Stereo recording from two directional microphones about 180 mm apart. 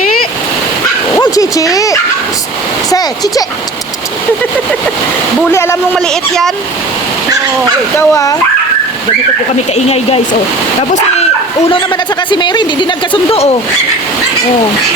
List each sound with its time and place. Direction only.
1.2 s a sound: 20° left (ahead or behind)
5.5 s a child's voice: 15° left (ahead or behind)
7.9 s a child's voice: 15° left (ahead or behind)
9.7 s speech: 35° left (ahead or behind)
12.3 s speech: 25° left (ahead or behind)